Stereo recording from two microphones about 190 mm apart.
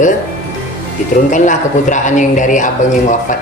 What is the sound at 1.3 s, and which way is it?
A man's voice, 40° left (ahead or behind).